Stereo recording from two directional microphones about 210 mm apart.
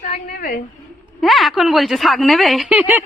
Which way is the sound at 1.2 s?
Centre (ahead or behind).